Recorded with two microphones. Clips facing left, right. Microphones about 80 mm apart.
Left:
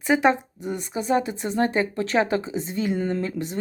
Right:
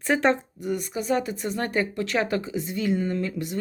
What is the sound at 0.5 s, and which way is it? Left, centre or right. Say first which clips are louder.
Speech: even; left.